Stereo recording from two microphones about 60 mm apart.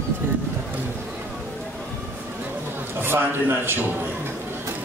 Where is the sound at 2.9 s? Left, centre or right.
Right.